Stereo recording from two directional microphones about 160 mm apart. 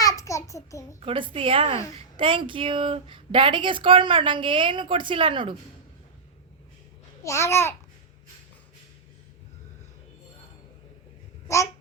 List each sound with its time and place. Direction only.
0.0 s a sound: 20° left (ahead or behind)
0.9 s speech: 35° right (ahead or behind)
7.3 s babbling: 15° left (ahead or behind)
11.4 s babbling: 20° left (ahead or behind)